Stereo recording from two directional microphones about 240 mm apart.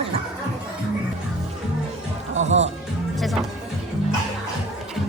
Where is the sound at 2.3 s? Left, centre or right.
Right.